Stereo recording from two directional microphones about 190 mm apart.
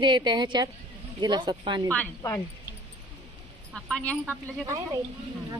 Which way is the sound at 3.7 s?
5° left (ahead or behind).